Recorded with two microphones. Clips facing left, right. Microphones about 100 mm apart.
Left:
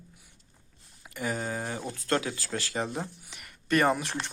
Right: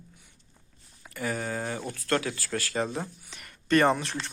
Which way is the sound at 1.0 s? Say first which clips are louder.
Right 1 dB; 20° left (ahead or behind).